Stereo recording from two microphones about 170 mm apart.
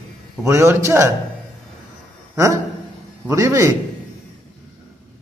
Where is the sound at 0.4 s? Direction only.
15° right (ahead or behind).